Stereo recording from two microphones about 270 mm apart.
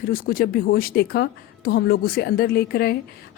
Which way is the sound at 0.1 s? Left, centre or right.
Left.